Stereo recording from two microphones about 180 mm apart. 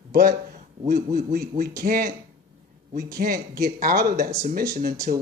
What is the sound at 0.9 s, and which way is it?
Speech, 55° right (ahead or behind).